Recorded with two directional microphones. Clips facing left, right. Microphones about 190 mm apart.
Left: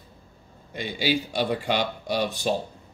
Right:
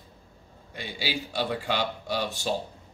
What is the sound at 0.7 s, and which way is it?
Speech, 20° left (ahead or behind).